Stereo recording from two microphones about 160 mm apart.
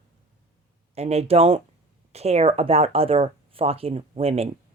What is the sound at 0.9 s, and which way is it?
Speech, 40° right (ahead or behind).